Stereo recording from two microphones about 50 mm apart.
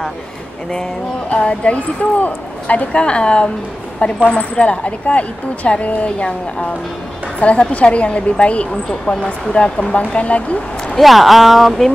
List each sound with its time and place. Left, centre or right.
1.3 s speech: left
11.0 s speech: centre